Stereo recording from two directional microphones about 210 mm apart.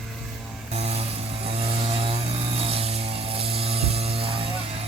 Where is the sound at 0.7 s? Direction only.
30° right (ahead or behind).